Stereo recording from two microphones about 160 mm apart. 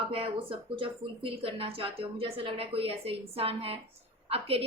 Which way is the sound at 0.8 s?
35° right (ahead or behind).